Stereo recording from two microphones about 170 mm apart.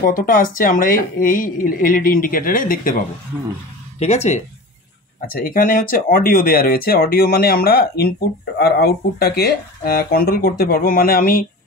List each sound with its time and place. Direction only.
0.0 s speech: 55° left (ahead or behind)
4.0 s speech: 40° left (ahead or behind)
5.2 s speech: 60° left (ahead or behind)